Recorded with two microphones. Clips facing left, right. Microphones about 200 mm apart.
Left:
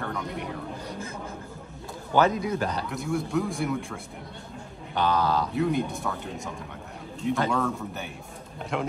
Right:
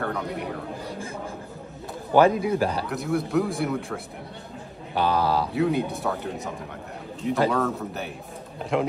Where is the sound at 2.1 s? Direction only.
30° right (ahead or behind).